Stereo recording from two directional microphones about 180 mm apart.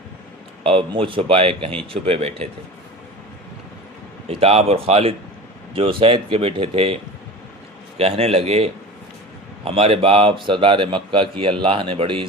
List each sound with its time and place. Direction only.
0.6 s speech: 30° right (ahead or behind)
4.3 s speech: 35° right (ahead or behind)